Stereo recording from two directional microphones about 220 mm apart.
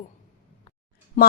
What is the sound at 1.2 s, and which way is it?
Speech, 35° left (ahead or behind).